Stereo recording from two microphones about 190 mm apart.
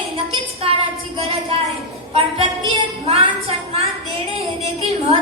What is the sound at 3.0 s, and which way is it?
Speech, 30° right (ahead or behind).